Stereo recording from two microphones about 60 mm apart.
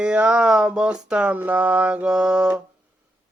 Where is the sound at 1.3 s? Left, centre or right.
Right.